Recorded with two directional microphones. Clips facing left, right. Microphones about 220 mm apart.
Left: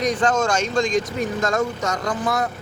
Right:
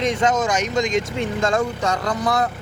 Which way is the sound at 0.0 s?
25° right (ahead or behind).